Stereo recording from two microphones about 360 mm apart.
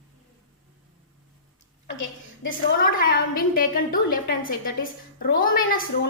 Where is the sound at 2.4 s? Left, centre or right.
Left.